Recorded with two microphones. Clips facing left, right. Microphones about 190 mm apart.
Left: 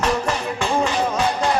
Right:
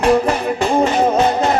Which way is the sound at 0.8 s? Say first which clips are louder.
Right 6 dB; 55° right (ahead or behind).